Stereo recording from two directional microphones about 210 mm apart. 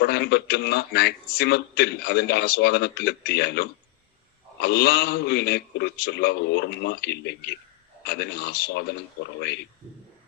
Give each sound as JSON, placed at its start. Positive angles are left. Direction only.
{"t": 0.0, "sound": "a man's voice", "side_deg": 50}